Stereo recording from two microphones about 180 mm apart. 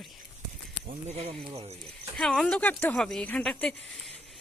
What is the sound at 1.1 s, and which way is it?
Speech, 35° right (ahead or behind).